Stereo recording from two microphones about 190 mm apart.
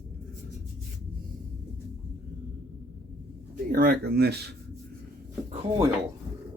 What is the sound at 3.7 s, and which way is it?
Speech, 55° right (ahead or behind).